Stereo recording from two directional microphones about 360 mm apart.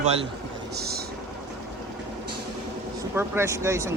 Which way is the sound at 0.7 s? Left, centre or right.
Right.